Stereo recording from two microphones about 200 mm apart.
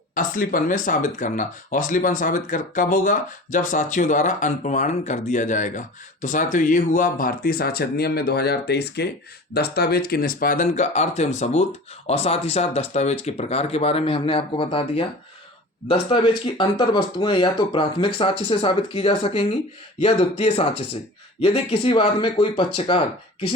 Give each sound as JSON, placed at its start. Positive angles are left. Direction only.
{"t": 0.1, "sound": "speech", "side_deg": 45}